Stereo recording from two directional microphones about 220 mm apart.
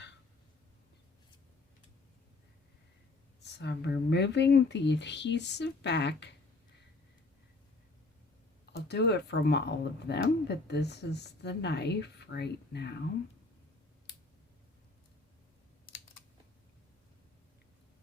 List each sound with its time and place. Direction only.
3.4 s speech: 50° left (ahead or behind)
8.7 s speech: 50° left (ahead or behind)